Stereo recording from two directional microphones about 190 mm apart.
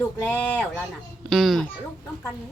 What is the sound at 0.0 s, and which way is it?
Speech, 10° left (ahead or behind).